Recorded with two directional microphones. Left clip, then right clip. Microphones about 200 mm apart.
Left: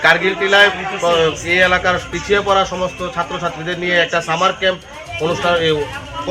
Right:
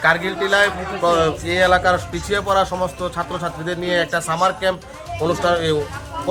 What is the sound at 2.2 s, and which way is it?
Speech, 35° right (ahead or behind).